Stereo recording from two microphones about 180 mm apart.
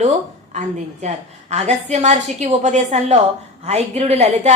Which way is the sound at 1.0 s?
40° right (ahead or behind).